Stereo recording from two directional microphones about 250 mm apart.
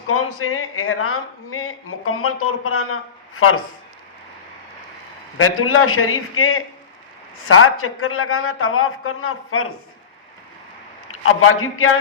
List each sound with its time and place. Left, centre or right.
0.1 s a man's voice: left
5.4 s a man's voice: left
11.1 s a man's voice: left